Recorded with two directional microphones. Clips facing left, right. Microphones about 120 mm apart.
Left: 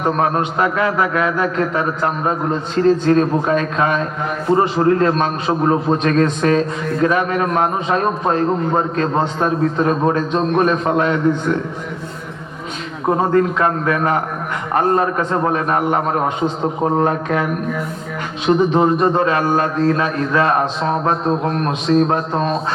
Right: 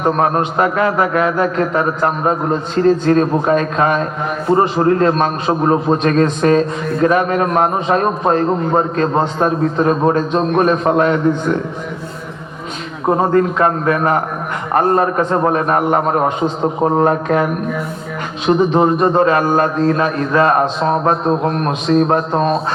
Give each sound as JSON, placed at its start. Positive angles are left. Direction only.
{"t": 0.0, "sound": "a man's voice", "side_deg": -40}
{"t": 13.1, "sound": "a man's voice", "side_deg": -35}
{"t": 22.3, "sound": "a man's voice", "side_deg": -30}